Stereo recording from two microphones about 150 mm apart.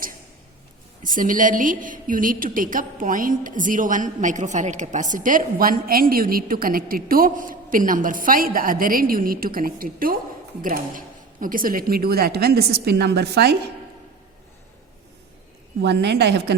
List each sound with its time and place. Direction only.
1.0 s a woman's voice: 65° right (ahead or behind); by 13.5 s 90° right
15.9 s speech: 90° right